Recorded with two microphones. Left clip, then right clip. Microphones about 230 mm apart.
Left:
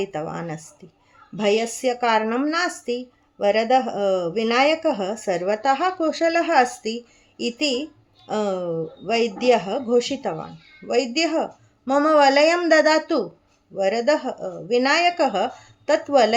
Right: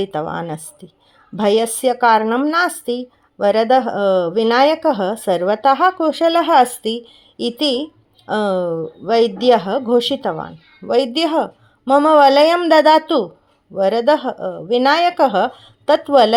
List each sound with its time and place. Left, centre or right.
0.1 s speech: right
2.8 s speech: right
3.3 s speech: right
6.7 s a woman's voice: centre
7.4 s speech: right